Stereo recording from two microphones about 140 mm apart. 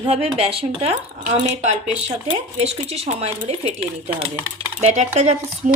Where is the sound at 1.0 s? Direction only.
65° right (ahead or behind).